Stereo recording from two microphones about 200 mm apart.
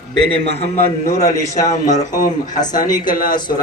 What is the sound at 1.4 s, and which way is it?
Speech, 15° left (ahead or behind).